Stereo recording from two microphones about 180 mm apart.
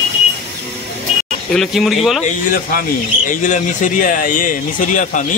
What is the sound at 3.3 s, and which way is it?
Speech, 45° left (ahead or behind).